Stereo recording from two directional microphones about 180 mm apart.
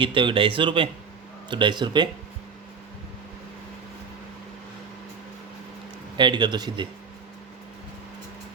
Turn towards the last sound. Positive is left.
turn(degrees=-25)  # may be behind; listen again after turning